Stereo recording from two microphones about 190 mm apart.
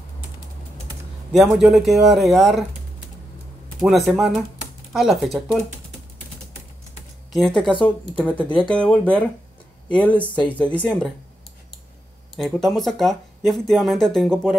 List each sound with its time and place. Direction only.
1.4 s speech: centre (ahead or behind)
3.8 s speech: centre (ahead or behind)
7.3 s speech: centre (ahead or behind)
10.1 s speech: 25° left (ahead or behind)
10.8 s speech: 5° left (ahead or behind)
12.4 s speech: centre (ahead or behind)